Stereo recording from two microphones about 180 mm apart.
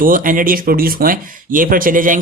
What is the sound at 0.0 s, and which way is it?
Speech, 50° right (ahead or behind).